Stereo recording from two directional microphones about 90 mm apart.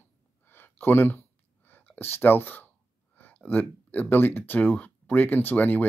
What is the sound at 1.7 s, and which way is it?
Speech, 20° left (ahead or behind).